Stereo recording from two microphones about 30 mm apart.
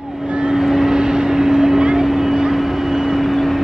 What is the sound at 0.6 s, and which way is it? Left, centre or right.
Vehicle, centre.